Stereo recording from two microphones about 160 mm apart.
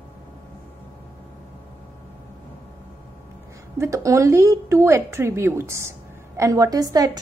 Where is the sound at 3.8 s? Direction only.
20° right (ahead or behind).